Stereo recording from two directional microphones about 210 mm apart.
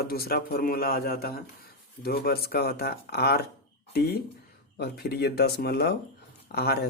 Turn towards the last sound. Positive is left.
turn(degrees=50)  # may be behind; listen again after turning